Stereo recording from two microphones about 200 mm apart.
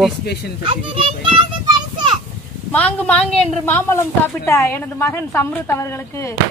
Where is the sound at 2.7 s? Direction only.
5° left (ahead or behind).